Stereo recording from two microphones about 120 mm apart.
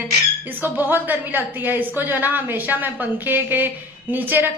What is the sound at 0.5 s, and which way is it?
A woman's voice, 15° right (ahead or behind).